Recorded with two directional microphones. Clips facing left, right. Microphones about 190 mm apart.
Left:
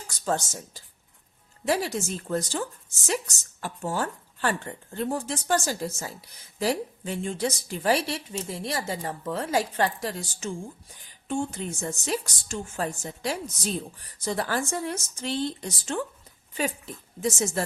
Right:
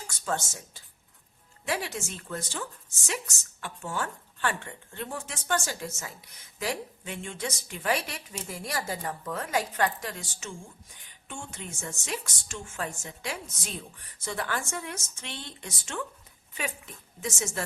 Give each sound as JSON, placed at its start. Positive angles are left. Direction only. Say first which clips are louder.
{"t": 0.1, "sound": "a woman's voice", "louder": "left 5 dB", "side_deg": 35}